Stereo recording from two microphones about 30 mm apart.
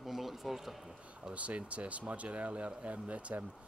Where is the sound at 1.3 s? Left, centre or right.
Right.